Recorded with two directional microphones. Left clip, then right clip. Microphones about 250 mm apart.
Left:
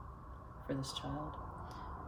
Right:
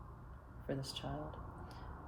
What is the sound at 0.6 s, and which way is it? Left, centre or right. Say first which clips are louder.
Speech: left 2 dB; right.